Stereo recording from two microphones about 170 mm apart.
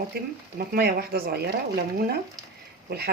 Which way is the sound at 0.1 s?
70° right (ahead or behind).